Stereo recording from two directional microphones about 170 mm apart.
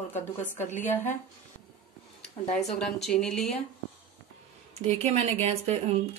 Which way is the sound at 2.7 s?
5° left (ahead or behind).